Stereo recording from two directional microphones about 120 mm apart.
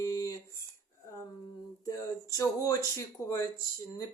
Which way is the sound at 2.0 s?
25° left (ahead or behind).